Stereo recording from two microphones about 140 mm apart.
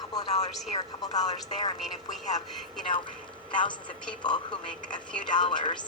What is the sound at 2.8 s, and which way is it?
Speech, 35° left (ahead or behind).